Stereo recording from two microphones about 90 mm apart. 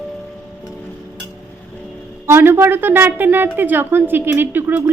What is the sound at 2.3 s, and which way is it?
A woman's voice, 25° right (ahead or behind).